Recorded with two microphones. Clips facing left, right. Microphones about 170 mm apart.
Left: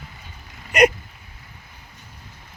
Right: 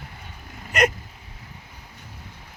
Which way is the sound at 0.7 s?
10° left (ahead or behind).